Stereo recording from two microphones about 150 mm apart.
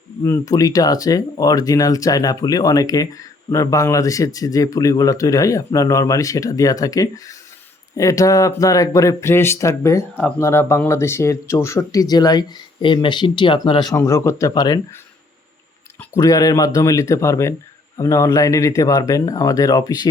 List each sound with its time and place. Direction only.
0.3 s speech: 25° left (ahead or behind)
13.9 s speech: 20° left (ahead or behind)
16.1 s speech: 25° left (ahead or behind)